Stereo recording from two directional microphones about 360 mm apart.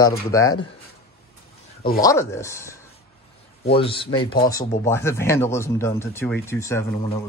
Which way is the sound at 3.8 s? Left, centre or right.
Centre.